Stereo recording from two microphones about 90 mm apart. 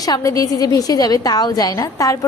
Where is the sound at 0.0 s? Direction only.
40° left (ahead or behind).